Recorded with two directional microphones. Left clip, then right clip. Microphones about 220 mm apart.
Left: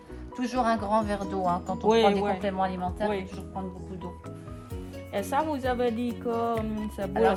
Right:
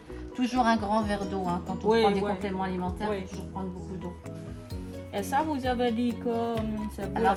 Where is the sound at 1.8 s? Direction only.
25° left (ahead or behind).